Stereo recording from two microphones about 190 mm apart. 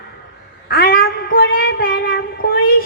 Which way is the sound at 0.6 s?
50° left (ahead or behind).